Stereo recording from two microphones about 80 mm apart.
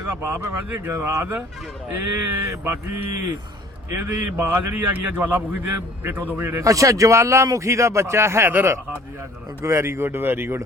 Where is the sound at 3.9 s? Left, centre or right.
Right.